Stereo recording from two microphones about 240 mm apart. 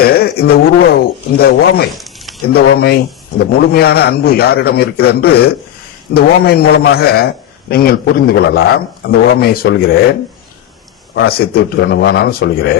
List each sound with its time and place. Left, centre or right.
0.0 s a man's voice: left